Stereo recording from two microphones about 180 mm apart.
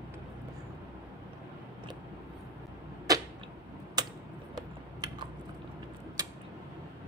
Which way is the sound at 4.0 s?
20° right (ahead or behind).